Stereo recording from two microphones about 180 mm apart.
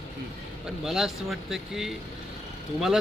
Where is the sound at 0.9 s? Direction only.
Centre (ahead or behind).